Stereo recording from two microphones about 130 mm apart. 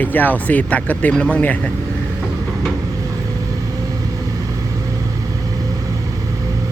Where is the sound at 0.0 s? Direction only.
15° left (ahead or behind).